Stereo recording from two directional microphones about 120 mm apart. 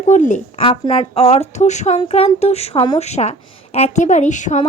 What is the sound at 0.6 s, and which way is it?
A woman's voice, 50° left (ahead or behind).